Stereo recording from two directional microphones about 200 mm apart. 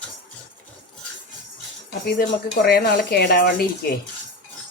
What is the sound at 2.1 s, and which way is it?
Speech, 50° left (ahead or behind).